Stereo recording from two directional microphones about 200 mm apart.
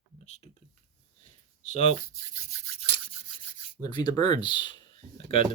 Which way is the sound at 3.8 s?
25° left (ahead or behind).